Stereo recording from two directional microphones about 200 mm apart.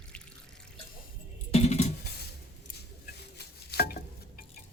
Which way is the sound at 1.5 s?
30° left (ahead or behind).